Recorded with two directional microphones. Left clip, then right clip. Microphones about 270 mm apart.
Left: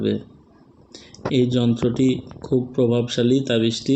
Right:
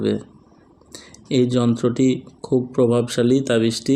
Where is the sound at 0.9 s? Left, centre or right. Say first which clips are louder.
Right 1 dB; right.